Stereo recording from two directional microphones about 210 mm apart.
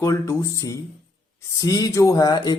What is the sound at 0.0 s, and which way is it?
Speech, 15° left (ahead or behind).